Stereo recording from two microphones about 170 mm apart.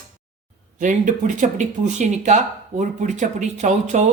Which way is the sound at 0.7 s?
50° right (ahead or behind).